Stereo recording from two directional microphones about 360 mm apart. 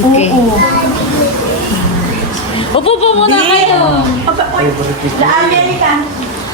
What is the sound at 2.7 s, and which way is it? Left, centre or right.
Speech, centre.